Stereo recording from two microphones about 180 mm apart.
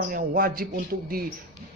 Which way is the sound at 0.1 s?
55° right (ahead or behind).